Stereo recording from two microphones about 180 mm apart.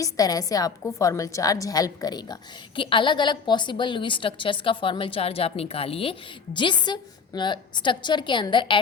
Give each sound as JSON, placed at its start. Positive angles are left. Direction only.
{"t": 0.0, "sound": "a woman's voice", "side_deg": 20}